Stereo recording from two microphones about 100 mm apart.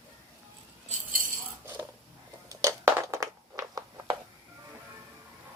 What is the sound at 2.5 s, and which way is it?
Crushing, 35° right (ahead or behind).